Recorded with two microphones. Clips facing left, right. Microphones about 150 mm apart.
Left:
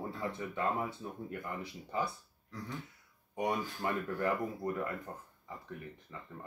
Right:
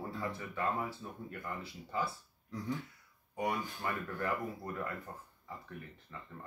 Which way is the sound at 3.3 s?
20° left (ahead or behind).